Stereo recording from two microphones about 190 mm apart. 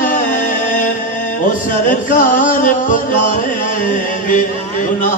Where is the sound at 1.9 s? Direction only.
45° left (ahead or behind).